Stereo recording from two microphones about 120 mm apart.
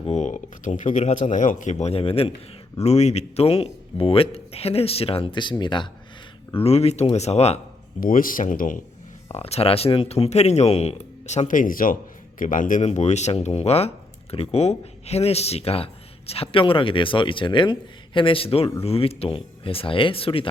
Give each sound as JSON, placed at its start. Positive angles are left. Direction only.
{"t": 0.0, "sound": "speech", "side_deg": 65}
{"t": 2.7, "sound": "speech", "side_deg": 65}
{"t": 6.6, "sound": "speech", "side_deg": 60}
{"t": 8.4, "sound": "a man's voice", "side_deg": 90}
{"t": 9.3, "sound": "a man's voice", "side_deg": 60}